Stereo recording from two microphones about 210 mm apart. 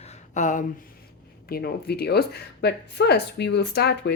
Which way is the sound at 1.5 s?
50° left (ahead or behind).